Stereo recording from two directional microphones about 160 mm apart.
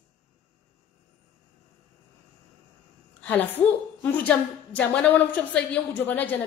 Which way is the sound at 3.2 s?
10° left (ahead or behind).